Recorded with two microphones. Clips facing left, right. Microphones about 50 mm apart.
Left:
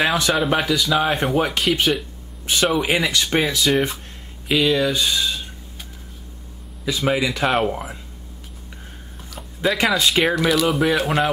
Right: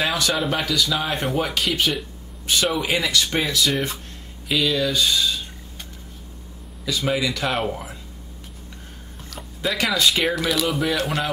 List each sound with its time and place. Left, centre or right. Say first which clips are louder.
0.0 s a sound: left 3 dB; centre
0.3 s speech: left 4 dB; centre
2.8 s speech: left 2 dB; left
3.3 s speech: left 3 dB; centre
6.8 s speech: left 2 dB; centre
9.8 s speech: left 1 dB; centre